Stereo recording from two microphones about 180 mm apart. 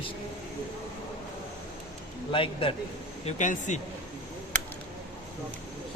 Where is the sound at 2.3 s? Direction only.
30° left (ahead or behind).